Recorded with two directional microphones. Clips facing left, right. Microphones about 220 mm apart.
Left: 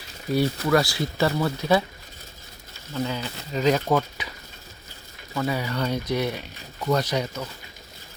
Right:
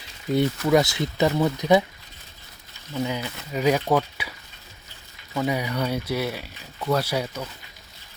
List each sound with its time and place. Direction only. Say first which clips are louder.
0.3 s speech: right 1 dB; 20° right (ahead or behind)
2.9 s speech: right 1 dB; 15° right (ahead or behind)